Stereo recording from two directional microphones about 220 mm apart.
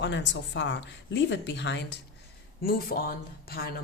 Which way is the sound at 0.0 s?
55° left (ahead or behind).